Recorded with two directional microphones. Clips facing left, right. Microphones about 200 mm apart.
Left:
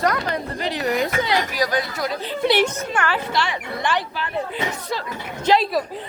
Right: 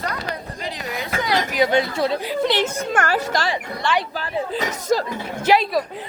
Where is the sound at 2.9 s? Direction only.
45° right (ahead or behind).